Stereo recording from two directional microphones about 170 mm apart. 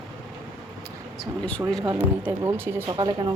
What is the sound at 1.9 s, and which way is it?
Speech, 10° right (ahead or behind).